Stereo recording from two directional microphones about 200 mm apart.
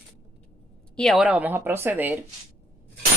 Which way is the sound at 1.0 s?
Centre (ahead or behind).